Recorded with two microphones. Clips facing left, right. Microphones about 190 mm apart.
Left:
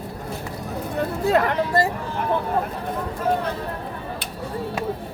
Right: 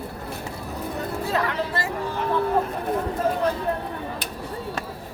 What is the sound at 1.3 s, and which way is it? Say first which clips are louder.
Chatter: left 7 dB; 50° left (ahead or behind).